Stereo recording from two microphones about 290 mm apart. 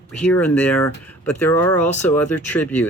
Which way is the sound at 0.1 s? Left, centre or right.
Centre.